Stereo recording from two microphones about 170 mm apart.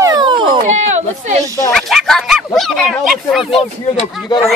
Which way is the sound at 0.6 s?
45° right (ahead or behind).